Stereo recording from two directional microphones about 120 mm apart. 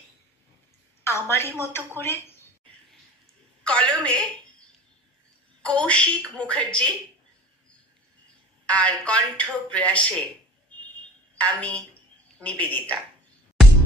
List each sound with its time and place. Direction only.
1.3 s a woman's voice: 20° left (ahead or behind)
3.6 s speech: 10° left (ahead or behind)
5.6 s speech: 10° left (ahead or behind)
8.6 s speech: 10° left (ahead or behind)
11.3 s a woman's voice: 10° left (ahead or behind)